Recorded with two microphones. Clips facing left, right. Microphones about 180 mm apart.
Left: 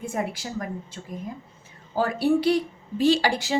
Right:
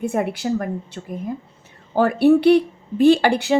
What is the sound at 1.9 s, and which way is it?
A woman's voice, 60° right (ahead or behind).